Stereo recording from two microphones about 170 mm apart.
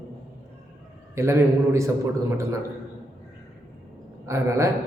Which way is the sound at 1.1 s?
15° right (ahead or behind).